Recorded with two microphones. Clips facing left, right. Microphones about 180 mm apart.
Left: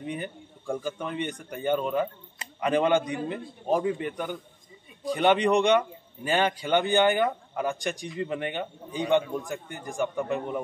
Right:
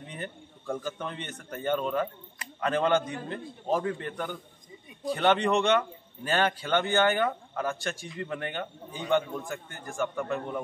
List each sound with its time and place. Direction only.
0.0 s a man's voice: 10° left (ahead or behind)